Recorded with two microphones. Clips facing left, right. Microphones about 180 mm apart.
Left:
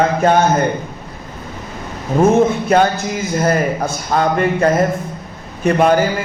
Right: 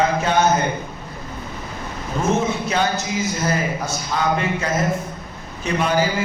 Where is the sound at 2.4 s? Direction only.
55° left (ahead or behind).